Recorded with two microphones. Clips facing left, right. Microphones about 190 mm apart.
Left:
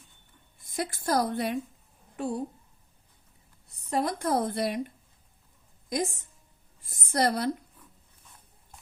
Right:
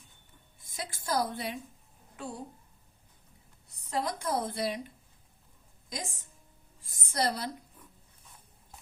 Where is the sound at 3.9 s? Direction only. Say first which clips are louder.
Left 5 dB; 60° left (ahead or behind).